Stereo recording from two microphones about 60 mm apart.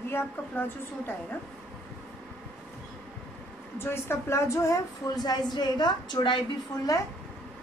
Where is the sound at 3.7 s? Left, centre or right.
Left.